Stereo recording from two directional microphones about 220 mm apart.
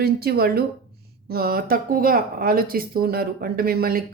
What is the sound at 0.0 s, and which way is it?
Speech, 45° right (ahead or behind).